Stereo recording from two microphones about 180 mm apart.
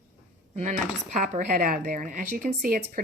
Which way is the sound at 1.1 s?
45° right (ahead or behind).